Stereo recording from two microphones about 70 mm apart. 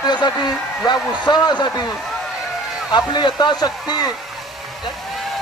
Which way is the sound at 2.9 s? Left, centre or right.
Left.